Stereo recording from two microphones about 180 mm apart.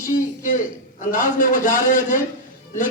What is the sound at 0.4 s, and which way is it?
A man's voice, 50° left (ahead or behind).